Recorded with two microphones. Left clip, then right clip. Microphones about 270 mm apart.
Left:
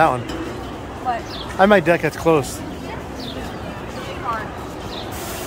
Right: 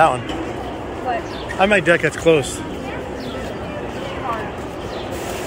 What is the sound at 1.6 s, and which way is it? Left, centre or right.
Speech, centre.